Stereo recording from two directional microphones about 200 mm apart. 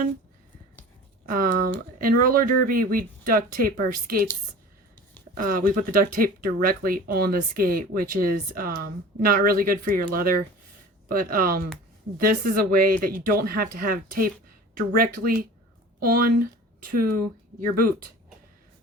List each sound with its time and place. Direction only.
1.3 s speech: 45° right (ahead or behind)
5.5 s speech: 45° right (ahead or behind)